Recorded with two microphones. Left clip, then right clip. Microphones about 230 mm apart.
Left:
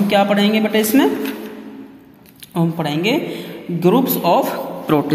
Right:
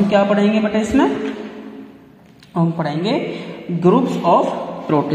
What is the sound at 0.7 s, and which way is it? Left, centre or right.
Speech, left.